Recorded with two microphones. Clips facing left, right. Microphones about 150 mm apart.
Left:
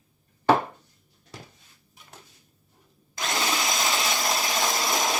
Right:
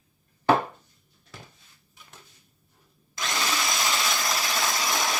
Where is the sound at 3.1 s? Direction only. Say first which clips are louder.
Left 2 dB; 25° left (ahead or behind).